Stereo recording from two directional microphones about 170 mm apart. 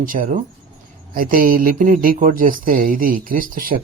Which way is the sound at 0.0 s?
50° right (ahead or behind).